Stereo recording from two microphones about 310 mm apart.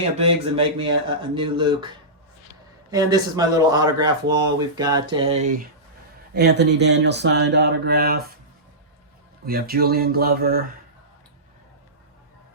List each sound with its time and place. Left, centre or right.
0.2 s speech: centre
2.9 s speech: centre
6.3 s speech: right
9.5 s a sound: right